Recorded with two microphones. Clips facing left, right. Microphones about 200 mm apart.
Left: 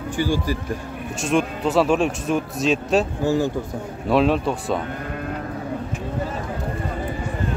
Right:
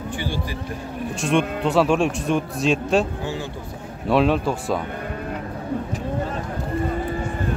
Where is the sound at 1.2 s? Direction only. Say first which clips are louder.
Even; centre (ahead or behind).